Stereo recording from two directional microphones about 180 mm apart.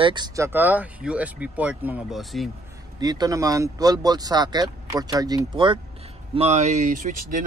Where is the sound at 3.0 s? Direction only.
20° right (ahead or behind).